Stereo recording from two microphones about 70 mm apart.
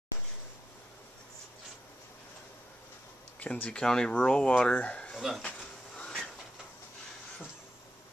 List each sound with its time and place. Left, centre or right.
3.3 s speech: left
3.8 s speech: centre
5.1 s speech: centre
5.9 s a sound: centre